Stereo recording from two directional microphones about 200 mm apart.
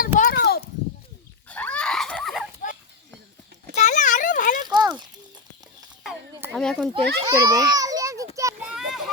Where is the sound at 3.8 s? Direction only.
40° left (ahead or behind).